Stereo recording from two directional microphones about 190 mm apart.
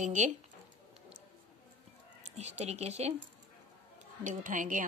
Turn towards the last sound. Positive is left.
turn(degrees=-45)  # may be behind; listen again after turning